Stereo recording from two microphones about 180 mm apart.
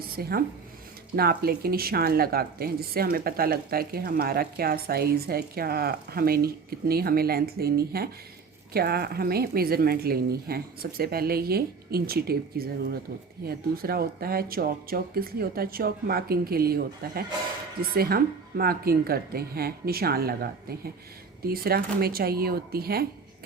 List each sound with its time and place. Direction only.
0.1 s speech: 55° right (ahead or behind)